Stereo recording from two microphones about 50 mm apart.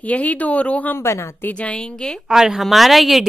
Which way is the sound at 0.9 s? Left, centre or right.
Left.